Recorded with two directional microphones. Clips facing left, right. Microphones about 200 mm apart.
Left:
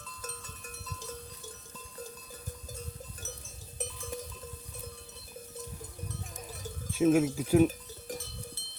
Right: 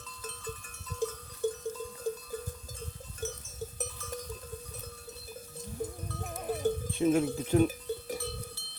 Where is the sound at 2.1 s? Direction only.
55° right (ahead or behind).